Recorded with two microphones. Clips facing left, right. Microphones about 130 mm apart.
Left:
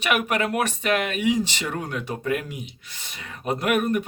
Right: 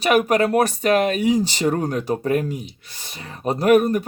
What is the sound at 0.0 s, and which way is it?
Speech, 35° right (ahead or behind).